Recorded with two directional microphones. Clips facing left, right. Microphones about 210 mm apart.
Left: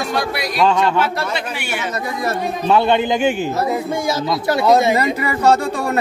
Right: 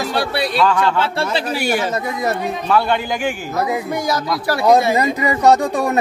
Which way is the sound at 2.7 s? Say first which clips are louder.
Left 3 dB; 20° left (ahead or behind).